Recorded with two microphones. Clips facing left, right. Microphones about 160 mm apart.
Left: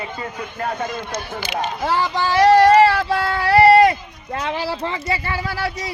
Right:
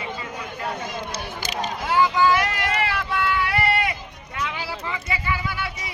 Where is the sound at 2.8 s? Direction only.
35° left (ahead or behind).